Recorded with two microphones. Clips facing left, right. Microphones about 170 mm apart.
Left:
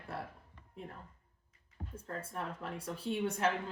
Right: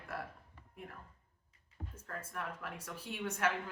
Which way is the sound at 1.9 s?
30° left (ahead or behind).